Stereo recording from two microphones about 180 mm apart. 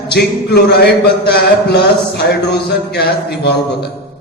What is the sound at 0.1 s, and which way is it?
Speech, 65° left (ahead or behind).